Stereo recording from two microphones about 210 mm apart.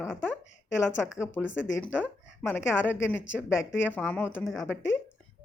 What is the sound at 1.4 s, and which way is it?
A woman's voice, 5° left (ahead or behind).